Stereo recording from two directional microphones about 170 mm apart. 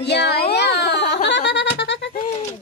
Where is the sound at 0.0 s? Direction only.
75° left (ahead or behind).